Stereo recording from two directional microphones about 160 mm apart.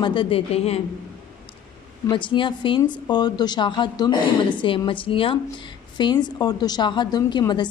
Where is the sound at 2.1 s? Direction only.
30° left (ahead or behind).